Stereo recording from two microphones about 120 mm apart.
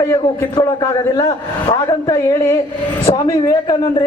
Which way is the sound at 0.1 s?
25° left (ahead or behind).